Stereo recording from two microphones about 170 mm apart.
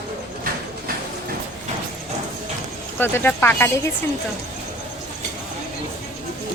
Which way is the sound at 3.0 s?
10° left (ahead or behind).